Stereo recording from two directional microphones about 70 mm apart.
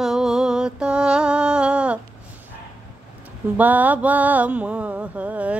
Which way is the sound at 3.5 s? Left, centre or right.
Right.